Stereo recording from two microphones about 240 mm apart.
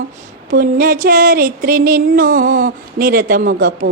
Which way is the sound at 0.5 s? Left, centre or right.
Right.